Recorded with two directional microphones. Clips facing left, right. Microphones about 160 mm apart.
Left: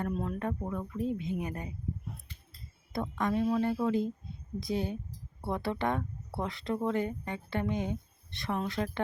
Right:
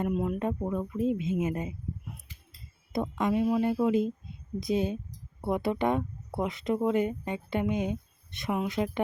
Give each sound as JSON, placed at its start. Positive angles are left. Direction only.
{"t": 0.0, "sound": "speech", "side_deg": -10}
{"t": 2.9, "sound": "speech", "side_deg": -20}